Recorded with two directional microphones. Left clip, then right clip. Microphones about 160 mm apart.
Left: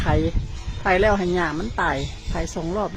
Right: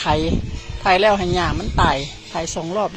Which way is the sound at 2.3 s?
Centre (ahead or behind).